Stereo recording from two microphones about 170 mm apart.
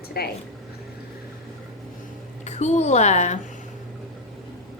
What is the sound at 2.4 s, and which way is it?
Speech, 40° left (ahead or behind).